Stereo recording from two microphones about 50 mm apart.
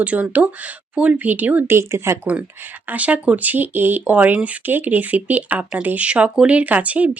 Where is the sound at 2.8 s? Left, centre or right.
Right.